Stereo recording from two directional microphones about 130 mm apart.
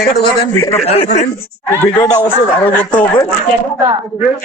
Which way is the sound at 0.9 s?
55° left (ahead or behind).